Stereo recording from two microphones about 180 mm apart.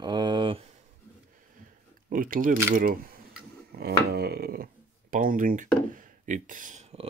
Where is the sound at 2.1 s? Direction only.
50° right (ahead or behind).